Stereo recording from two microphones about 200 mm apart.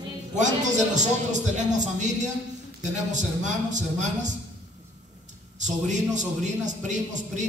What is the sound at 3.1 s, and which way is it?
A man's voice, 35° right (ahead or behind).